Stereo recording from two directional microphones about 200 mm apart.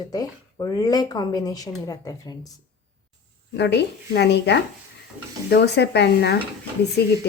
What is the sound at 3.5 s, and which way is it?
Speech, 60° left (ahead or behind).